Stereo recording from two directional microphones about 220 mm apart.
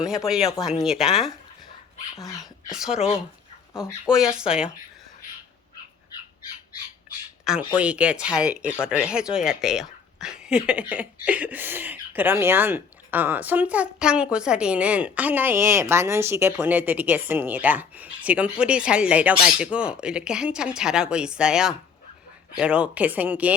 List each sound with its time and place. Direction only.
0.0 s speech: centre (ahead or behind)
2.6 s speech: centre (ahead or behind)
7.5 s speech: centre (ahead or behind)